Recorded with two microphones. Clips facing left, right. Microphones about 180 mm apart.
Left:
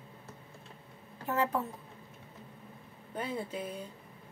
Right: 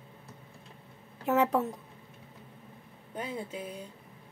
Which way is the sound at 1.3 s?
75° right (ahead or behind).